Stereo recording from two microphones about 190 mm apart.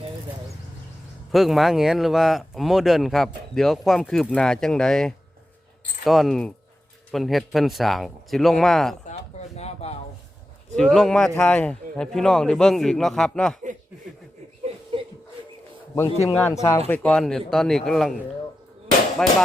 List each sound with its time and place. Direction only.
1.3 s speech: centre (ahead or behind)
9.6 s speech: 35° left (ahead or behind)
10.8 s speech: centre (ahead or behind)
14.9 s a sound: 30° right (ahead or behind)
16.2 s speech: 10° left (ahead or behind)